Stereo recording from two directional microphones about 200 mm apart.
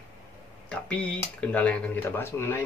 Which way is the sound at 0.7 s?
5° left (ahead or behind).